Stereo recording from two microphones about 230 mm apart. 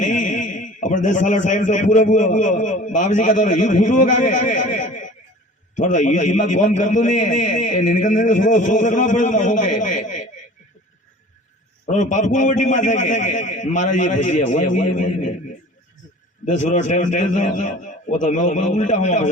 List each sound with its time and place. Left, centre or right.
0.0 s a man's voice: left
9.8 s snicker: left
11.9 s a man's voice: left
16.5 s a man's voice: left